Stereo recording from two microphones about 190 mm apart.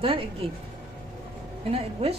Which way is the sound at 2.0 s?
30° right (ahead or behind).